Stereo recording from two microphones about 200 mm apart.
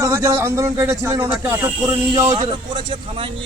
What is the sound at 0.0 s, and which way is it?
Speech, 15° right (ahead or behind).